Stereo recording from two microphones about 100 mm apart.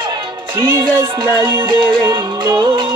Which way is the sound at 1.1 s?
55° right (ahead or behind).